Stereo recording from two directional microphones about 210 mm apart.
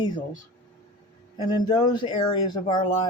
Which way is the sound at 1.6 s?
20° left (ahead or behind).